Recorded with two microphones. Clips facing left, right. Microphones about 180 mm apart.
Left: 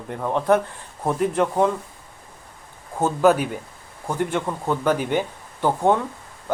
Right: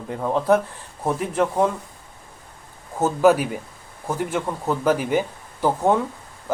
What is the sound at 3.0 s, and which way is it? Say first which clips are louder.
Speech: right 1 dB; 5° right (ahead or behind).